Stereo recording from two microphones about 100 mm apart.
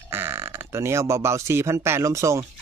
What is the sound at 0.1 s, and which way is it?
Speech, 25° right (ahead or behind).